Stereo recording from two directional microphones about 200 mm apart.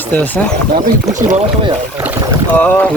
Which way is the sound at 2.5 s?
10° left (ahead or behind).